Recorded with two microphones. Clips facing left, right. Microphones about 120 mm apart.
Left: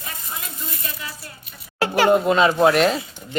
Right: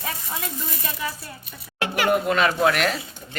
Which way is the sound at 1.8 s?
30° left (ahead or behind).